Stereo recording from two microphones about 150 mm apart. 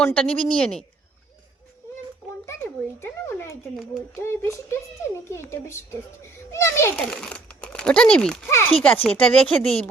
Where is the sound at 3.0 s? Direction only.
15° left (ahead or behind).